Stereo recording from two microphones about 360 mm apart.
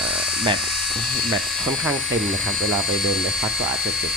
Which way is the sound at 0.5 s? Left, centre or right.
Centre.